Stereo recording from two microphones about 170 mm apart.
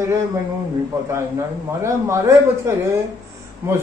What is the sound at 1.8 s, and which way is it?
Speech, 15° right (ahead or behind).